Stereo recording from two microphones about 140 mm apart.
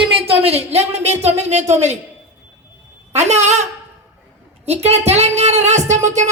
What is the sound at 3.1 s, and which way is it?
A woman's voice, 55° right (ahead or behind).